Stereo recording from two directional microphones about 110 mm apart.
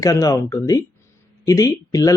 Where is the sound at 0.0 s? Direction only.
30° left (ahead or behind).